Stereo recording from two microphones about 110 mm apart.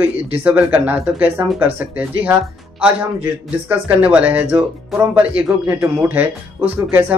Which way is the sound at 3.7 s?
15° right (ahead or behind).